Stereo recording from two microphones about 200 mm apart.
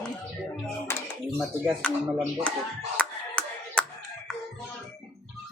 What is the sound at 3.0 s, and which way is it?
Music, 5° left (ahead or behind).